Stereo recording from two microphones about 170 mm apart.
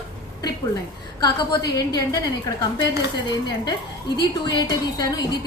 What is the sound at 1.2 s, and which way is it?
Speech, 20° left (ahead or behind).